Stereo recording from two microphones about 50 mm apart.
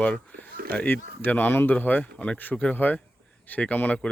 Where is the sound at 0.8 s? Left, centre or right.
Left.